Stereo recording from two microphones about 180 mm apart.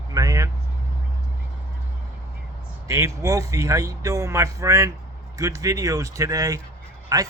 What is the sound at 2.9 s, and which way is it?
Speech, 15° right (ahead or behind).